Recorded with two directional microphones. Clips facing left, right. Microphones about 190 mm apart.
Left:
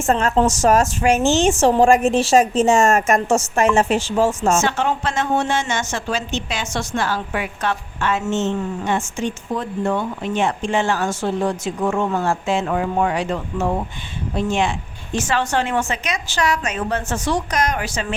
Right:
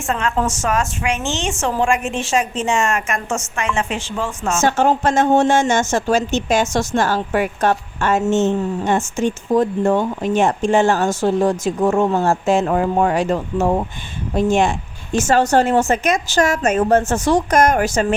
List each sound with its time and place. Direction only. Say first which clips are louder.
0.0 s a woman's voice: left 3 dB; 40° left (ahead or behind)
4.6 s a woman's voice: right 5 dB; 45° right (ahead or behind)